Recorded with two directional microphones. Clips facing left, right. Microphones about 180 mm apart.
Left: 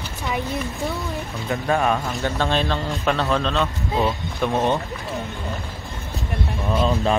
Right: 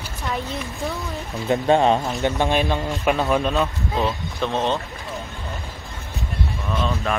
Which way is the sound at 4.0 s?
10° left (ahead or behind).